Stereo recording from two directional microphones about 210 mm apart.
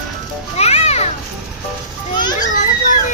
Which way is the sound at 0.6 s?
30° left (ahead or behind).